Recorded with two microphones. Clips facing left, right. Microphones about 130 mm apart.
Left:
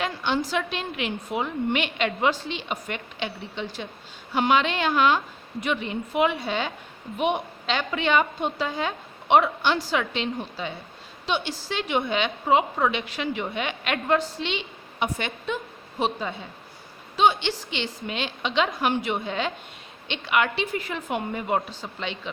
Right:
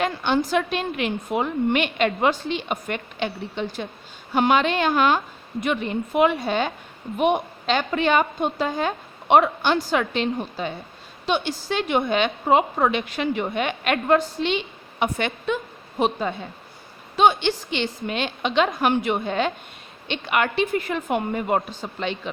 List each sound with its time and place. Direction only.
0.0 s a woman's voice: 50° right (ahead or behind)